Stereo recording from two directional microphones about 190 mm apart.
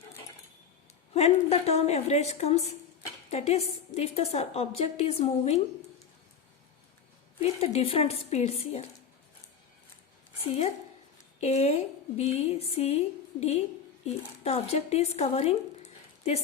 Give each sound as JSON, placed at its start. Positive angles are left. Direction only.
{"t": 1.1, "sound": "a woman's voice", "side_deg": 35}
{"t": 7.4, "sound": "a woman's voice", "side_deg": 30}
{"t": 10.4, "sound": "a woman's voice", "side_deg": 35}